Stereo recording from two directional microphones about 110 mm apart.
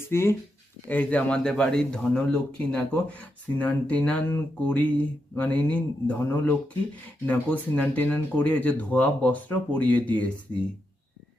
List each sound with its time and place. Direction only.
0.1 s speech: 25° left (ahead or behind)